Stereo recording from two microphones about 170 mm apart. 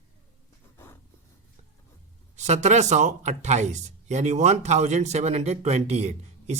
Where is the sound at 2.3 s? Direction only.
45° right (ahead or behind).